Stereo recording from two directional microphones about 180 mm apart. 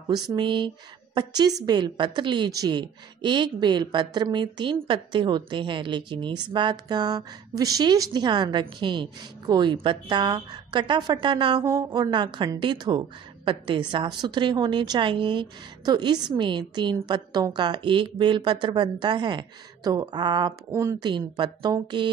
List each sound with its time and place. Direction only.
0.1 s a woman's voice: 25° right (ahead or behind)